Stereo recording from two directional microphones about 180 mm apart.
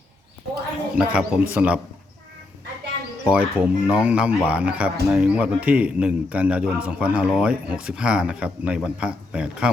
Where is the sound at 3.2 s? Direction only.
5° right (ahead or behind).